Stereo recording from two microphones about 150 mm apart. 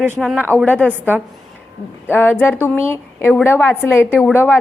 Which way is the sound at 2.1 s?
10° left (ahead or behind).